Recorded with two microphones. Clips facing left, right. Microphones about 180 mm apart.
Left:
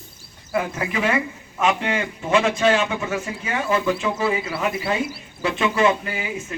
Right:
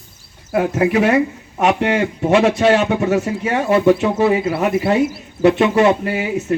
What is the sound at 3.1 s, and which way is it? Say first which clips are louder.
Speech: right 9 dB; 40° right (ahead or behind).